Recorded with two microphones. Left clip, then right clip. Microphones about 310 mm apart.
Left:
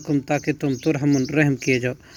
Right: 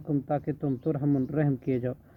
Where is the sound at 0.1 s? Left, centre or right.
Left.